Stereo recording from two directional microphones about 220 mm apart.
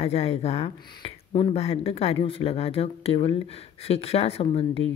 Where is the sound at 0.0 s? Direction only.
25° left (ahead or behind).